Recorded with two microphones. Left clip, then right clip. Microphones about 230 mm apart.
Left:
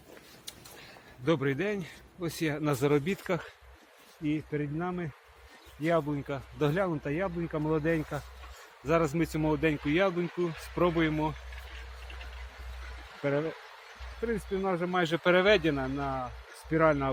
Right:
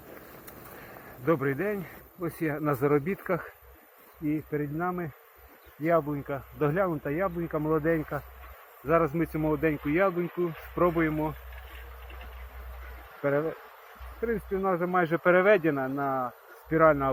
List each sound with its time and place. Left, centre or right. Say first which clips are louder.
1.2 s speech: right 2 dB; left
10.2 s speech: right 2 dB; left
10.8 s speech: right 2 dB; left
13.2 s speech: right 3 dB; left